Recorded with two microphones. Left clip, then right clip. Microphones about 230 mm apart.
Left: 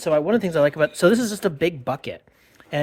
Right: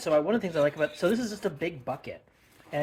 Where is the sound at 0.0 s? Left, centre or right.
Left.